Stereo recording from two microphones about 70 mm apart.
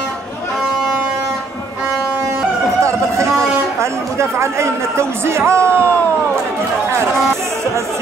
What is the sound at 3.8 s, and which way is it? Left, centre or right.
Speech, right.